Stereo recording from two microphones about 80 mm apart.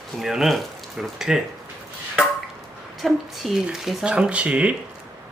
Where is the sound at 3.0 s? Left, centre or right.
Centre.